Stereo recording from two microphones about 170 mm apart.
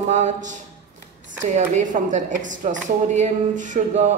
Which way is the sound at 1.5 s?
45° right (ahead or behind).